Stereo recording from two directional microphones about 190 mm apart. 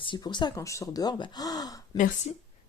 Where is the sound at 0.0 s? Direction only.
25° left (ahead or behind).